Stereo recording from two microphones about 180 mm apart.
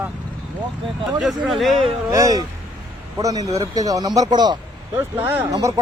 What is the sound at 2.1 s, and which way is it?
Speech, 20° right (ahead or behind).